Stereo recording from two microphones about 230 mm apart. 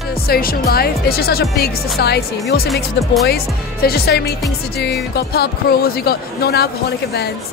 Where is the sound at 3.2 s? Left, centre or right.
Left.